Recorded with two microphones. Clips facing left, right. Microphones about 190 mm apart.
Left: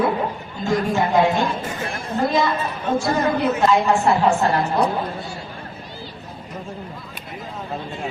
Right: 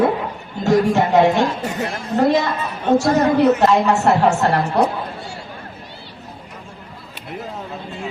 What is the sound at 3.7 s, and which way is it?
Speech, 70° right (ahead or behind).